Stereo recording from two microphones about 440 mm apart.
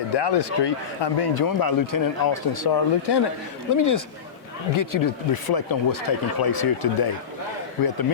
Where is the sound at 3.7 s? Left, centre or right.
Left.